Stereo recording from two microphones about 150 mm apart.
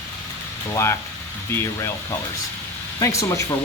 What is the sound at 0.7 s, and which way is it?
Speech, 15° left (ahead or behind).